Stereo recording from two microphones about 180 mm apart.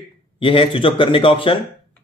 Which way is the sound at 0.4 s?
30° left (ahead or behind).